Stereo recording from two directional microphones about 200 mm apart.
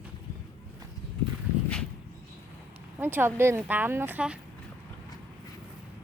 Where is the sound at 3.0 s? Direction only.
10° right (ahead or behind).